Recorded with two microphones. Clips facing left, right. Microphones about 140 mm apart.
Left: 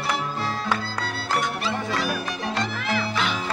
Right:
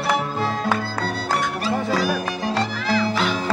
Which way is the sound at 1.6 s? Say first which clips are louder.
Right 5 dB; 40° right (ahead or behind).